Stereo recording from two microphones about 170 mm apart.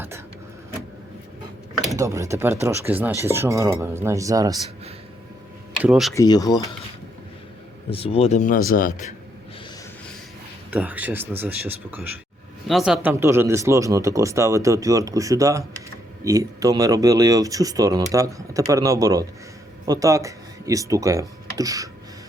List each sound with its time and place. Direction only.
2.0 s speech: 15° right (ahead or behind)
5.8 s speech: 5° right (ahead or behind)
6.1 s speech: 20° left (ahead or behind)
7.9 s speech: 35° left (ahead or behind); by 9.0 s 50° left (ahead or behind)
10.7 s speech: 10° right (ahead or behind)